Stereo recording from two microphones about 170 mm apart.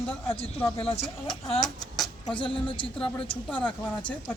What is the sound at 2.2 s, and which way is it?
Speech, 30° left (ahead or behind).